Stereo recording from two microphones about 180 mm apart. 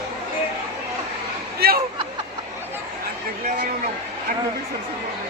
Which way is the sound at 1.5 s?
60° right (ahead or behind).